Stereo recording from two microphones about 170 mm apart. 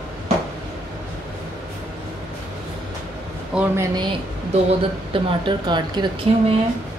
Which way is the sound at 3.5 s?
5° right (ahead or behind).